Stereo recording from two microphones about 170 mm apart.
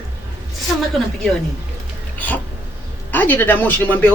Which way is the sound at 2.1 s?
10° left (ahead or behind).